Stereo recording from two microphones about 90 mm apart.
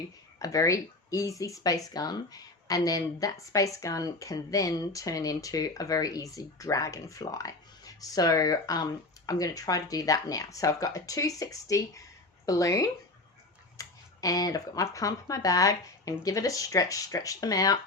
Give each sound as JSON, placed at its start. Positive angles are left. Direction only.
{"t": 0.3, "sound": "speech", "side_deg": 40}